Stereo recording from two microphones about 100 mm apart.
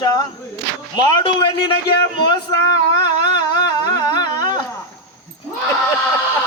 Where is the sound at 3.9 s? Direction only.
40° left (ahead or behind).